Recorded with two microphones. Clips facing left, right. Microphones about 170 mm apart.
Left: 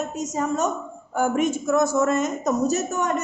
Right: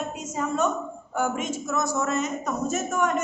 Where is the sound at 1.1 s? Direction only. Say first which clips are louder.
Left 6 dB; 55° left (ahead or behind).